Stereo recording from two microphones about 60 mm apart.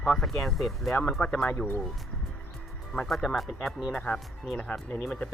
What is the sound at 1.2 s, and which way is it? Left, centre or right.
Speech, centre.